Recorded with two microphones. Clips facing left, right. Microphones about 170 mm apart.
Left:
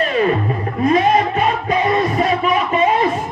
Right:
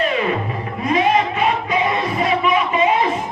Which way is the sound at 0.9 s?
40° left (ahead or behind).